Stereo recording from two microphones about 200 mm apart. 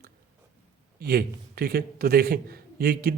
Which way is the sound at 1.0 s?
50° right (ahead or behind).